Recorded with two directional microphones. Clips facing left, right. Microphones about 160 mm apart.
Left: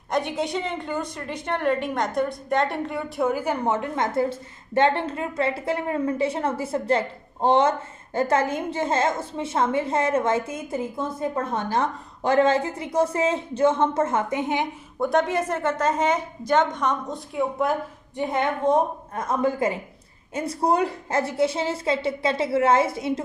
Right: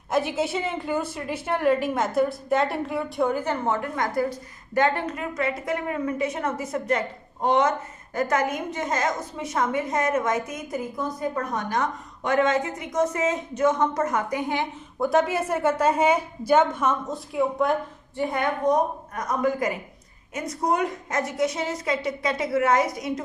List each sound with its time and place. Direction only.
0.1 s a woman's voice: 5° right (ahead or behind); by 14.7 s 20° left (ahead or behind)
15.0 s a woman's voice: centre (ahead or behind)
18.1 s a woman's voice: 20° left (ahead or behind)